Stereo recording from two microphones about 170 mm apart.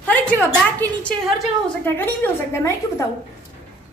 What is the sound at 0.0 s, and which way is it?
A woman's voice, 10° left (ahead or behind).